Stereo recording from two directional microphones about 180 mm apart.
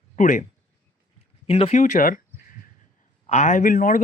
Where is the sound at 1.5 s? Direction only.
35° left (ahead or behind); by 2.2 s 50° left (ahead or behind).